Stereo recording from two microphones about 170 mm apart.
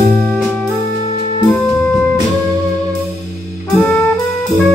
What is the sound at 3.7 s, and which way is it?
Music, 5° left (ahead or behind).